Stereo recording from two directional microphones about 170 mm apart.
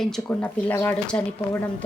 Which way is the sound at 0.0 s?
5° left (ahead or behind).